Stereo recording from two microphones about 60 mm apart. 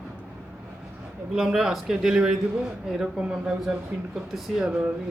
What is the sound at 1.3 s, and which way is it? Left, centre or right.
A man's voice, centre.